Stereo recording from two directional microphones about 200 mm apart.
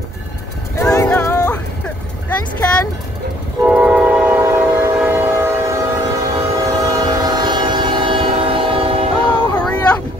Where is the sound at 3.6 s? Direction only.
5° right (ahead or behind).